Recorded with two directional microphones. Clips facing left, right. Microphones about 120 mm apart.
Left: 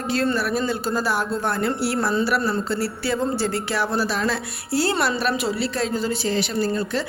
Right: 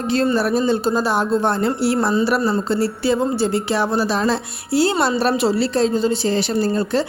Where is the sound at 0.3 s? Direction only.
30° right (ahead or behind).